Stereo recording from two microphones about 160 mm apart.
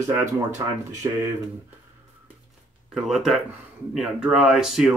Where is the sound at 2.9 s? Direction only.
Centre (ahead or behind).